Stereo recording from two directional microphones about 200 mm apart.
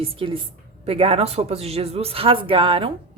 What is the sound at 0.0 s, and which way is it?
Speech, 25° right (ahead or behind).